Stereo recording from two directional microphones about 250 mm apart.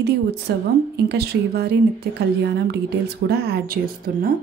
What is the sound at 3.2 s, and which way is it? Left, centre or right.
Speech, right.